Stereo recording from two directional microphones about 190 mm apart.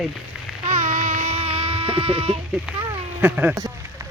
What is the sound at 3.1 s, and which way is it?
Speech, 10° right (ahead or behind).